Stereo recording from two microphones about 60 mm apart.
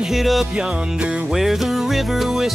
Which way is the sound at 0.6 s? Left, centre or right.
Centre.